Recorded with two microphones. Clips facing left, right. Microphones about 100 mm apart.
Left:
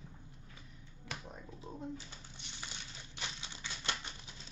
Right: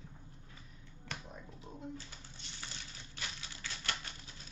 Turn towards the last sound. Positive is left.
turn(degrees=20)  # may be behind; listen again after turning